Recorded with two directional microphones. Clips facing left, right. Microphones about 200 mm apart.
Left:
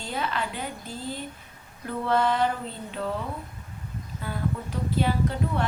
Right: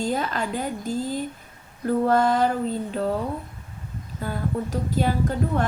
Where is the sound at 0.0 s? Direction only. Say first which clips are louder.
Right 5 dB; 40° right (ahead or behind).